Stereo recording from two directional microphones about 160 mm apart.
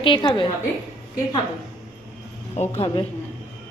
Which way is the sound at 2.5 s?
35° left (ahead or behind).